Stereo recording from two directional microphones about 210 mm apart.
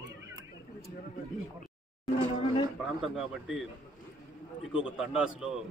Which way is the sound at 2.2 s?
25° left (ahead or behind).